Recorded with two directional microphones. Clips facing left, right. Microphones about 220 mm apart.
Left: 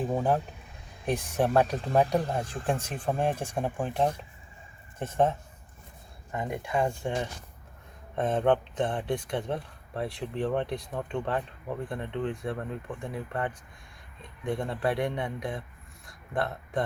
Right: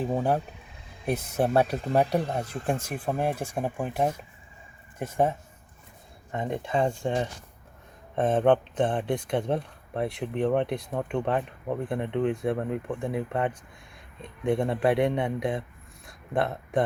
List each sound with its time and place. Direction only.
1.0 s speech: 10° right (ahead or behind)
6.3 s speech: 25° right (ahead or behind)
14.6 s speech: 20° right (ahead or behind)
16.0 s a sound: 25° right (ahead or behind)